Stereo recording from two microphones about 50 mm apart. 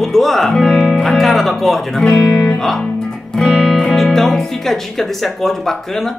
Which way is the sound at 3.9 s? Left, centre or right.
Centre.